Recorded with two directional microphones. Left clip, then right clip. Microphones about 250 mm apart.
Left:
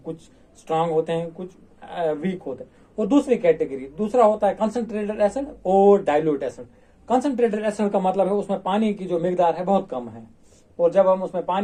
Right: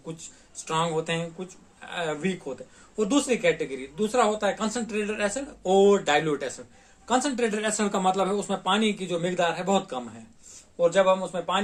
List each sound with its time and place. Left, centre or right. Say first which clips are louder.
0.7 s a man's voice: left 5 dB; right